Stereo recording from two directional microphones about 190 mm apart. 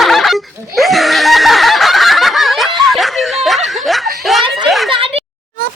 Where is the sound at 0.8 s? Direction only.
Centre (ahead or behind).